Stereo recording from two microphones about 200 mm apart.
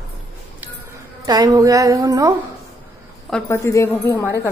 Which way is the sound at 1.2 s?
20° right (ahead or behind).